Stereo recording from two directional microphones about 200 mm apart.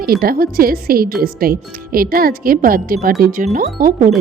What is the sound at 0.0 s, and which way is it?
A woman's voice, 50° right (ahead or behind).